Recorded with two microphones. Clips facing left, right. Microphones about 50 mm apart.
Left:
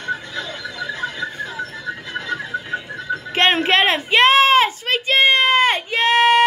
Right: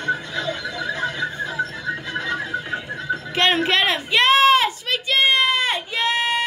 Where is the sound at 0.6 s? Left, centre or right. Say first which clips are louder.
Right 1 dB; centre.